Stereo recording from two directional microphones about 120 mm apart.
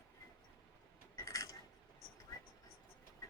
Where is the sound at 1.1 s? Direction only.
25° left (ahead or behind).